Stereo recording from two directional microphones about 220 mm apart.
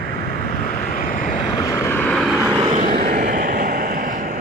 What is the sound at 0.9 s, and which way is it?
Vehicle, 40° left (ahead or behind).